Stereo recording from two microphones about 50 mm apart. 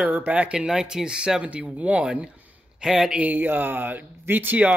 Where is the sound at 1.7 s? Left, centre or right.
Right.